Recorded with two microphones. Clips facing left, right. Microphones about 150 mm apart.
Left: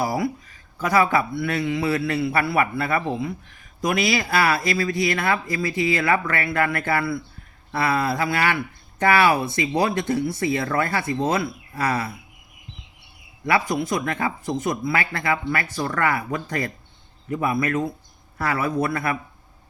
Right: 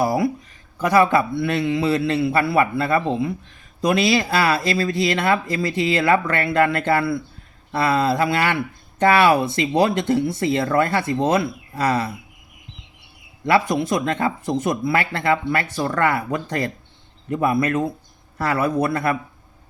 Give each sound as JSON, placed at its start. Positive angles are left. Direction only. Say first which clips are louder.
{"t": 0.0, "sound": "speech", "louder": "right 4 dB", "side_deg": -25}
{"t": 13.7, "sound": "speech", "louder": "right 3 dB", "side_deg": -25}